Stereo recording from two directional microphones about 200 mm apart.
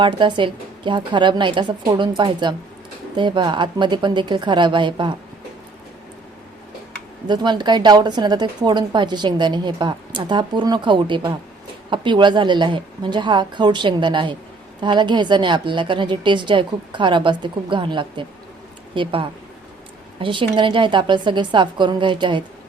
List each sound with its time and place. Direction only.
0.0 s a woman's voice: 25° right (ahead or behind)
7.3 s a woman's voice: 20° right (ahead or behind)